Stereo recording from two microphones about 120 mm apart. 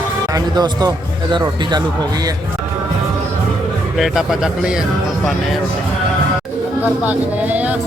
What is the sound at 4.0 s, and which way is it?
Speech, 5° right (ahead or behind).